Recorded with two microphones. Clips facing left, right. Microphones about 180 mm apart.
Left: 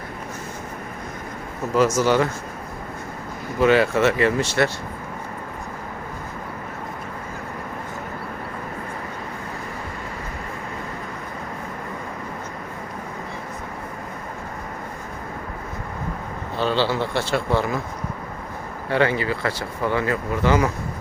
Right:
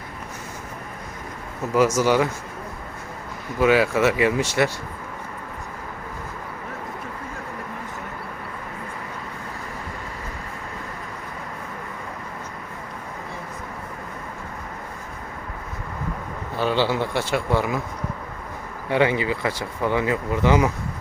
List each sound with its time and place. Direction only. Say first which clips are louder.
1.7 s speech: even; 10° right (ahead or behind)
3.6 s speech: left 1 dB; 5° right (ahead or behind)
16.6 s speech: even; 15° right (ahead or behind)
18.9 s speech: even; 15° right (ahead or behind)